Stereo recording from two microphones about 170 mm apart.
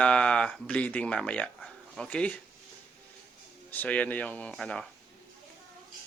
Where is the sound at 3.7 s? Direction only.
10° left (ahead or behind).